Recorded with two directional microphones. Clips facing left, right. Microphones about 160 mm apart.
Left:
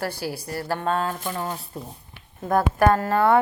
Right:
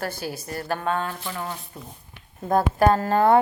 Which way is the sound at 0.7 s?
30° left (ahead or behind).